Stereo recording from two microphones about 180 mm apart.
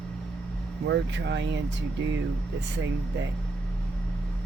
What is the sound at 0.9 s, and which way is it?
Speech, 75° right (ahead or behind).